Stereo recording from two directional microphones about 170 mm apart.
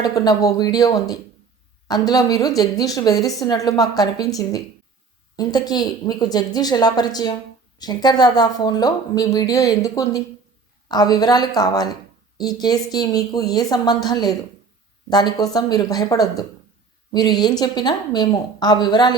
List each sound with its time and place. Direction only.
0.0 s speech: 20° left (ahead or behind)
5.4 s speech: 20° left (ahead or behind)